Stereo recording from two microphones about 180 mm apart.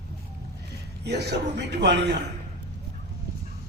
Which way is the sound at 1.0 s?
65° right (ahead or behind).